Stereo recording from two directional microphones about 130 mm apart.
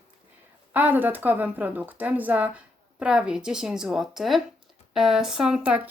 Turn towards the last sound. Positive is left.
turn(degrees=-10)  # may be behind; listen again after turning